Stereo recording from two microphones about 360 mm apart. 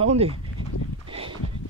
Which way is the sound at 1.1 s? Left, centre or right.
Centre.